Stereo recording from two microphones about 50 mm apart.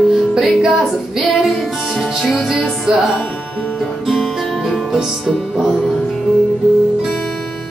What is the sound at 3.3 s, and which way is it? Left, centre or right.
Music, left.